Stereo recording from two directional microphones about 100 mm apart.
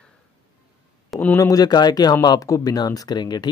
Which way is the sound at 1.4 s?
40° left (ahead or behind).